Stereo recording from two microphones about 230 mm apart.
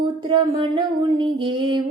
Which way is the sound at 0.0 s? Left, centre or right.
Centre.